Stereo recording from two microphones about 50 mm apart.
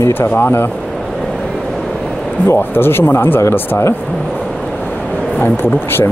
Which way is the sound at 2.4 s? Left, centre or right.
Left.